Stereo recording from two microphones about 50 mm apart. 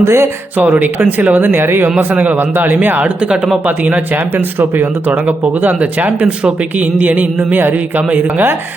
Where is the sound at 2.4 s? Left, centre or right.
Right.